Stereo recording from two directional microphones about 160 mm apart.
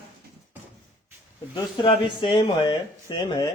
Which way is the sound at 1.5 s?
30° left (ahead or behind).